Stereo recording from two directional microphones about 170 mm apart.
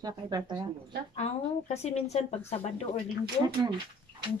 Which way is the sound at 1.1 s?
40° left (ahead or behind).